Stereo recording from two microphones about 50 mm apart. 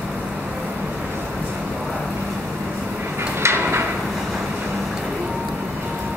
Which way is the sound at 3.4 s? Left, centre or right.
Right.